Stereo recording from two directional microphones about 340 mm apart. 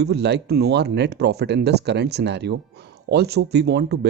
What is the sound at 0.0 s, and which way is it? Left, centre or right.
Speech, right.